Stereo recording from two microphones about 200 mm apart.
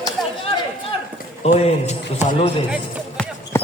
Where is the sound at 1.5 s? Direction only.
30° left (ahead or behind).